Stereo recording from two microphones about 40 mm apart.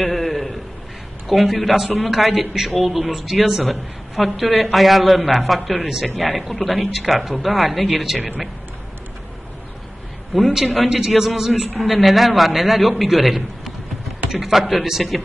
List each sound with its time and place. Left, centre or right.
0.0 s a sound: centre
1.2 s a man's voice: centre
10.5 s a man's voice: centre